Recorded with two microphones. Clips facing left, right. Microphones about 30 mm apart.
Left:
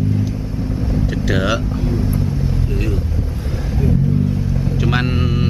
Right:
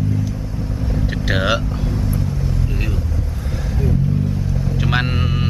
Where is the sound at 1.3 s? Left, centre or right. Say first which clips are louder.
Even; centre.